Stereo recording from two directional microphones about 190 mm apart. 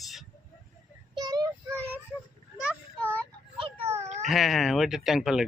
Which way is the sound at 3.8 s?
15° right (ahead or behind).